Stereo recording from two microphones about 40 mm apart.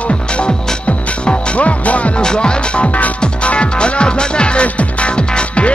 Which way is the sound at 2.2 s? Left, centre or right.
Left.